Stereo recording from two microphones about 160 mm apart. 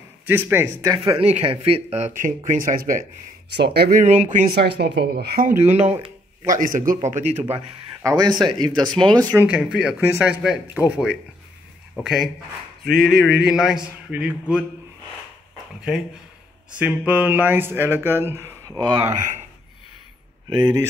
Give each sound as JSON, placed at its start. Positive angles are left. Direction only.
{"t": 0.3, "sound": "speech", "side_deg": -15}
{"t": 1.0, "sound": "speech", "side_deg": -40}
{"t": 3.5, "sound": "speech", "side_deg": -90}
{"t": 4.0, "sound": "speech", "side_deg": -50}
{"t": 4.6, "sound": "speech", "side_deg": -90}
{"t": 5.6, "sound": "speech", "side_deg": -45}
{"t": 6.4, "sound": "speech", "side_deg": -55}
{"t": 8.0, "sound": "speech", "side_deg": -25}
{"t": 9.5, "sound": "a man's voice", "side_deg": -5}
{"t": 15.5, "sound": "a sound", "side_deg": 0}
{"t": 16.8, "sound": "speech", "side_deg": -10}
{"t": 19.0, "sound": "speech", "side_deg": -45}
{"t": 20.4, "sound": "speech", "side_deg": -30}